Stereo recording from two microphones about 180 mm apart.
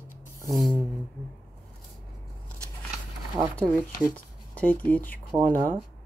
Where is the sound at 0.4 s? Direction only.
20° right (ahead or behind).